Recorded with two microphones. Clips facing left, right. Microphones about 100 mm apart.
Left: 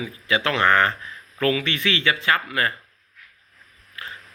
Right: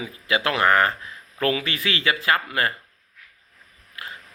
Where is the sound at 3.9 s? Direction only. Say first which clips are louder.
Even; 25° right (ahead or behind).